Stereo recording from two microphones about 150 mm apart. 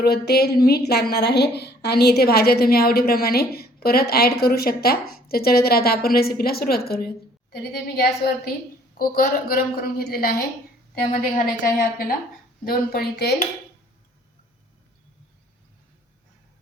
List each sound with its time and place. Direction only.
0.0 s a woman's voice: 90° left
9.0 s a woman's voice: 75° left (ahead or behind)
11.6 s a woman's voice: 70° left (ahead or behind)
12.6 s a woman's voice: 85° left